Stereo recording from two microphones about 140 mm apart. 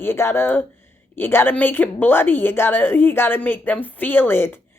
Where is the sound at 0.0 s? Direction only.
15° left (ahead or behind).